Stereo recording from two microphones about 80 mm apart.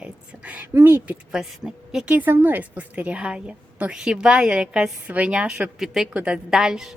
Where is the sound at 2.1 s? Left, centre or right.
Right; by 6.9 s centre.